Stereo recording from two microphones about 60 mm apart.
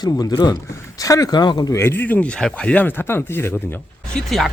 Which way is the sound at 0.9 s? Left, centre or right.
Left.